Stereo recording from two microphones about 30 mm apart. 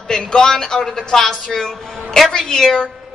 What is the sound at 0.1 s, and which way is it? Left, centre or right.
Speech, left.